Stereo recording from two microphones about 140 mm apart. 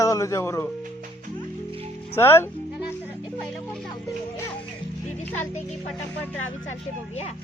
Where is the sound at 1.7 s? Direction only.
40° right (ahead or behind).